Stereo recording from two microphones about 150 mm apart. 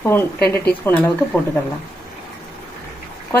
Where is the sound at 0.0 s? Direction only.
15° left (ahead or behind).